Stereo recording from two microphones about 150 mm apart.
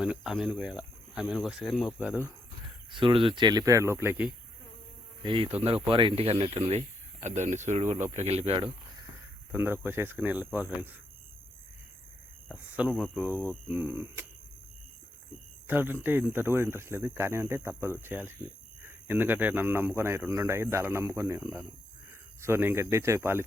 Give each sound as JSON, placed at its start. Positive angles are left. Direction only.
{"t": 0.0, "sound": "speech", "side_deg": -5}
{"t": 2.9, "sound": "speech", "side_deg": -35}
{"t": 5.2, "sound": "speech", "side_deg": -35}
{"t": 7.2, "sound": "speech", "side_deg": -50}
{"t": 9.5, "sound": "speech", "side_deg": -15}
{"t": 12.5, "sound": "speech", "side_deg": -10}
{"t": 15.6, "sound": "a man's voice", "side_deg": -15}